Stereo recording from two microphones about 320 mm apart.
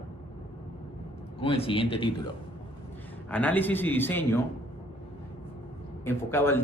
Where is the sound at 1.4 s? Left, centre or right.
Centre.